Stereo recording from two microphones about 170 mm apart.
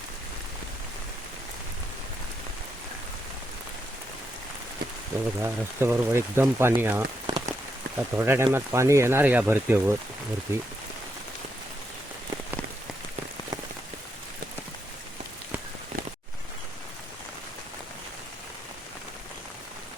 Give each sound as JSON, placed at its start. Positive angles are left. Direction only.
{"t": 5.4, "sound": "speech", "side_deg": -15}
{"t": 7.3, "sound": "rain on surface", "side_deg": -25}
{"t": 7.9, "sound": "speech", "side_deg": -15}